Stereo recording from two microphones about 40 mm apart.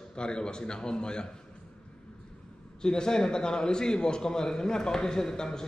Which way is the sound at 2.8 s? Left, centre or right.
Centre.